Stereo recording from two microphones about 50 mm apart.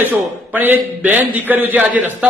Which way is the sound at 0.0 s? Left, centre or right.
Right.